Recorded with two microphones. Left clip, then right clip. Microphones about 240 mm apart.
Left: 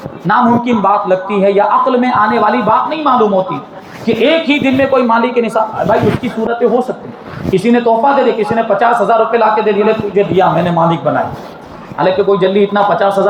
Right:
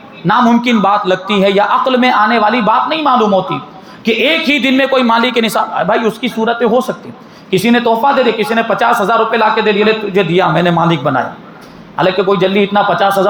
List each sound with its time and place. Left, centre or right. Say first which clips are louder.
0.3 s speech: even; right